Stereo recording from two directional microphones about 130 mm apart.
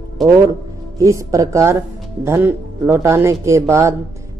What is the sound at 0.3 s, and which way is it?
Speech, 25° right (ahead or behind).